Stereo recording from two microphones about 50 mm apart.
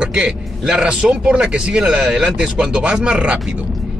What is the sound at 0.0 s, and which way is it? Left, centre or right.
Speech, centre.